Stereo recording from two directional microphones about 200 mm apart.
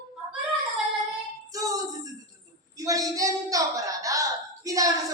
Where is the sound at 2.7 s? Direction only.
15° right (ahead or behind).